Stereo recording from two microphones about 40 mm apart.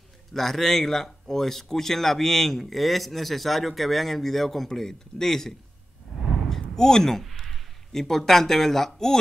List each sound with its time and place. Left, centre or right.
0.3 s speech: centre
6.5 s speech: centre